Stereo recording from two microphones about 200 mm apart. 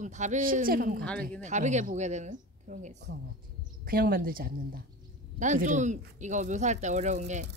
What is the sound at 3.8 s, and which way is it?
A woman's voice, 45° right (ahead or behind).